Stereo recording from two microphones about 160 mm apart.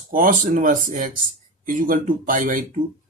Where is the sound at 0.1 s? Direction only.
60° right (ahead or behind).